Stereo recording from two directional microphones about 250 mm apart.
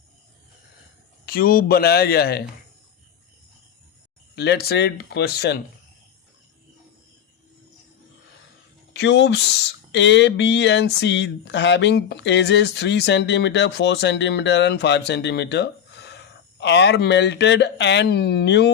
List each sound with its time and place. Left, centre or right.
1.2 s speech: left
4.4 s speech: left
8.9 s speech: left